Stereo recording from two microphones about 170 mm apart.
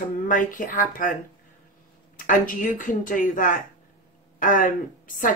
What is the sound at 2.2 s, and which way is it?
Speech, 50° left (ahead or behind).